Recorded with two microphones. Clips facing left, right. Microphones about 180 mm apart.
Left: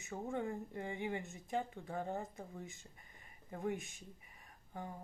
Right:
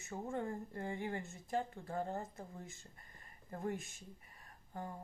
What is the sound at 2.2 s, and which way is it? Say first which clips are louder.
Speech: left 1 dB; centre (ahead or behind).